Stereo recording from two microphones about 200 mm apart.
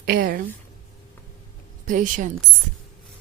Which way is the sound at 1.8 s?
40° right (ahead or behind).